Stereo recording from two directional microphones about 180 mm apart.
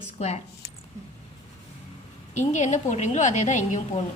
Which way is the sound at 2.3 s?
45° left (ahead or behind).